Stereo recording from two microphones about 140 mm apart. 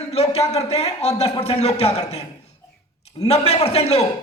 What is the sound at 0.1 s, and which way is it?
A man's voice, 45° left (ahead or behind).